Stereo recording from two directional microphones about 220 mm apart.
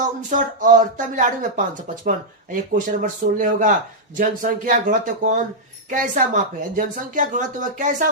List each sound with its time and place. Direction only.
0.0 s speech: 35° right (ahead or behind)
2.7 s speech: 35° right (ahead or behind)